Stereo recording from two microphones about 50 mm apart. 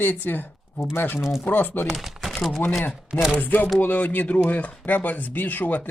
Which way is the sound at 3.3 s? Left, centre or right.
Left.